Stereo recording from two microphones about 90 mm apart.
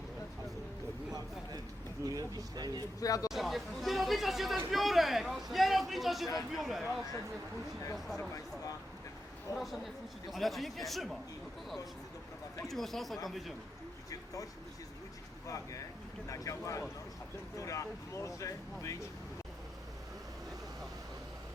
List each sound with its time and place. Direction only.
2.0 s speech: 45° right (ahead or behind)
3.0 s speech: 40° left (ahead or behind)
3.2 s a man's voice: centre (ahead or behind)
9.6 s a man's voice: centre (ahead or behind)
12.6 s a man's voice: 5° left (ahead or behind)
15.4 s speech: 40° left (ahead or behind)